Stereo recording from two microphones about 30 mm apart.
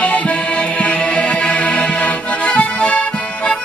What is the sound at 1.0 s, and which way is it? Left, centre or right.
Accordion, left.